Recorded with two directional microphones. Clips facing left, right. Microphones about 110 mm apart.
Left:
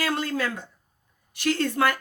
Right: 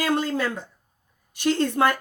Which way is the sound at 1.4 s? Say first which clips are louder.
Right 3 dB; 20° right (ahead or behind).